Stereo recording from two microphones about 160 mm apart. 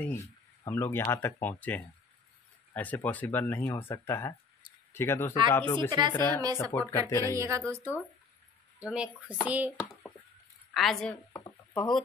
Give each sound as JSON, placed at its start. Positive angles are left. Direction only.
{"t": 0.0, "sound": "speech", "side_deg": 15}
{"t": 5.9, "sound": "a woman's voice", "side_deg": -25}
{"t": 6.7, "sound": "speech", "side_deg": 15}
{"t": 7.3, "sound": "speech", "side_deg": -20}
{"t": 8.7, "sound": "speech", "side_deg": -5}
{"t": 10.7, "sound": "speech", "side_deg": 0}
{"t": 11.4, "sound": "a sound", "side_deg": 20}